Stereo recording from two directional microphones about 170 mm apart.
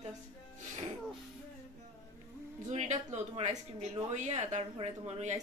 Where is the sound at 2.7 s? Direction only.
40° right (ahead or behind).